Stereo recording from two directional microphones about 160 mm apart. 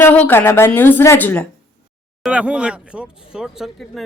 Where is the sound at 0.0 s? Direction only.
10° left (ahead or behind).